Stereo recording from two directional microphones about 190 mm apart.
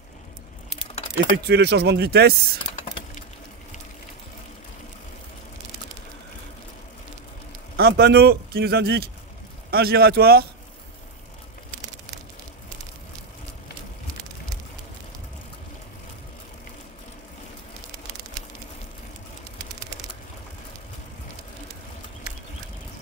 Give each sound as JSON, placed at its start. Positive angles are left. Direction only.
{"t": 1.1, "sound": "a man's voice", "side_deg": -60}
{"t": 7.7, "sound": "a man's voice", "side_deg": -55}